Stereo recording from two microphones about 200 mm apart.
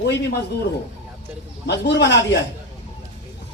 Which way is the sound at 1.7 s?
60° left (ahead or behind).